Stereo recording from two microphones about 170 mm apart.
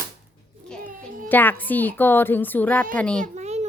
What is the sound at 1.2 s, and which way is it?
A woman's voice, 10° left (ahead or behind).